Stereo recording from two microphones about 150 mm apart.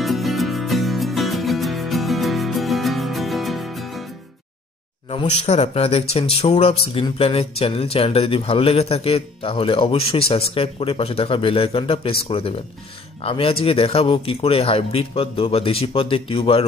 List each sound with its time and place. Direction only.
0.0 s music: centre (ahead or behind)
5.1 s speech: 45° left (ahead or behind)